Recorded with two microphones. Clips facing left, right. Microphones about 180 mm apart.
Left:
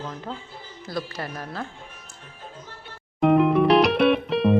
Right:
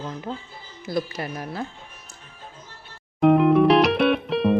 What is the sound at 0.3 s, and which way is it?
A woman's voice, 15° right (ahead or behind).